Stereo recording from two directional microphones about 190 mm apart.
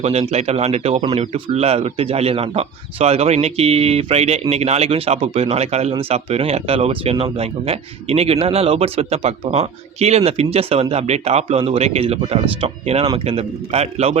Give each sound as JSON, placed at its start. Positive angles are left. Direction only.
{"t": 0.0, "sound": "a man's voice", "side_deg": -35}